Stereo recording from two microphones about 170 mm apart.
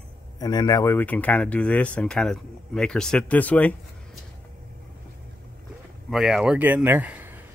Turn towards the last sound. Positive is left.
turn(degrees=-10)  # may be behind; listen again after turning